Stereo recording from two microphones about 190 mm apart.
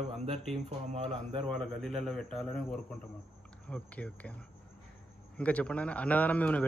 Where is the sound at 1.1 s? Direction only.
5° left (ahead or behind).